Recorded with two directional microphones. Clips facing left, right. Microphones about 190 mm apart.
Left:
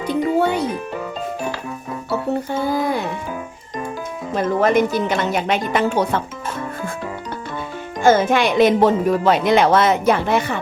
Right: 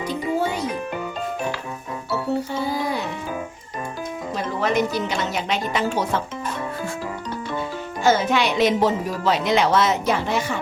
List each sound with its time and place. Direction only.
0.1 s music: 65° left (ahead or behind)
2.5 s music: 55° left (ahead or behind)
4.4 s speech: 50° left (ahead or behind)
8.0 s speech: 50° left (ahead or behind)